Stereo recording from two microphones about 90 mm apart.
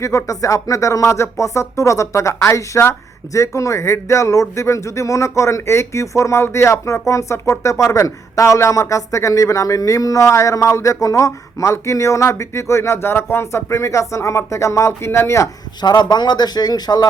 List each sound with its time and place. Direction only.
0.0 s speech: 35° left (ahead or behind)
15.8 s speech: 50° left (ahead or behind)